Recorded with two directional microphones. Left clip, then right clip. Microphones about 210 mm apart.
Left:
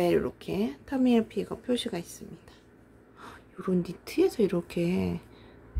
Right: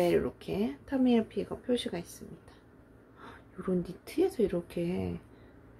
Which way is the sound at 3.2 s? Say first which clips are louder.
Left 3 dB; 15° left (ahead or behind).